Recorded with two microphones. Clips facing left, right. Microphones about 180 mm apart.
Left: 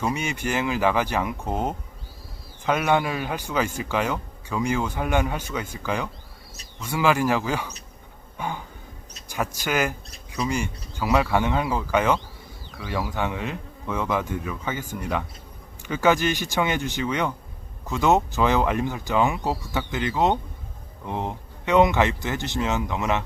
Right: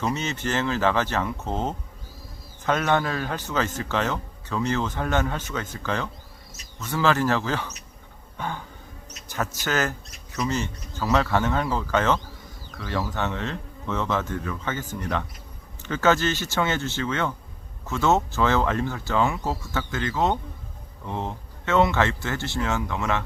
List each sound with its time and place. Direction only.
0.0 s a man's voice: 10° left (ahead or behind)